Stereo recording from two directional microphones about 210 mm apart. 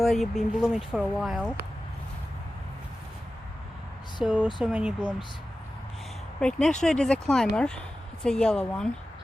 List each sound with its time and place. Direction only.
0.0 s speech: centre (ahead or behind)
4.2 s speech: 5° right (ahead or behind)
6.4 s speech: 5° left (ahead or behind)